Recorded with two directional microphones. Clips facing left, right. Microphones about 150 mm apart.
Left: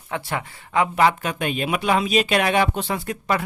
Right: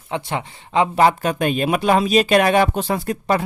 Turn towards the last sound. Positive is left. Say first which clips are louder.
# right 4 dB
turn(degrees=-35)  # may be behind; listen again after turning